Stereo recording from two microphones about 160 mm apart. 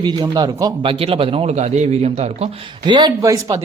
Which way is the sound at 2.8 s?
30° right (ahead or behind).